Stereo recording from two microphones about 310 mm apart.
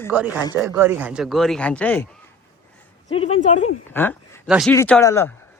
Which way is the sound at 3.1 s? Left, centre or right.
Centre.